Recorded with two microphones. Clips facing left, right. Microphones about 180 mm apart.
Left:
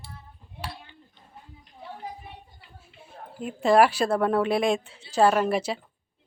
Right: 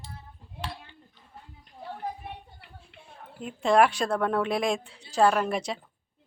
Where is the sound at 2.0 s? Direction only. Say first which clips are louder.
Right 3 dB; 60° right (ahead or behind).